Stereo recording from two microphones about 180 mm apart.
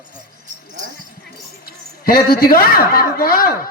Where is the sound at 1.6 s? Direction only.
55° left (ahead or behind).